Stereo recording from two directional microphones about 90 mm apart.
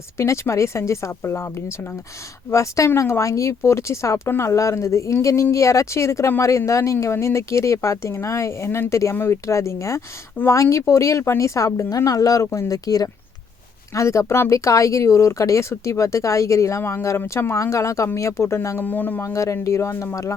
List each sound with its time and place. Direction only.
0.2 s speech: 30° left (ahead or behind)
18.9 s speech: 20° left (ahead or behind)
19.3 s speech: 35° left (ahead or behind)